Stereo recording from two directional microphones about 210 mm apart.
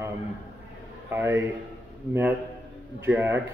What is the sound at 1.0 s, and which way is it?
Speech, 10° right (ahead or behind).